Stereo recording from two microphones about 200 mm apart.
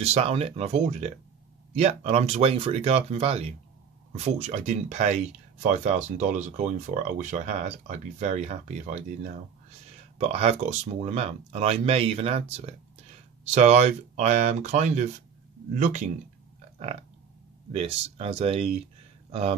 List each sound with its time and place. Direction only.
0.0 s speech: 30° right (ahead or behind)
17.7 s speech: 30° right (ahead or behind)